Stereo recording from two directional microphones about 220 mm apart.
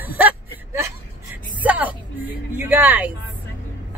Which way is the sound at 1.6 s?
5° right (ahead or behind).